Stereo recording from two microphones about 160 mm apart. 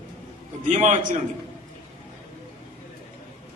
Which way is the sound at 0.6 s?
50° right (ahead or behind).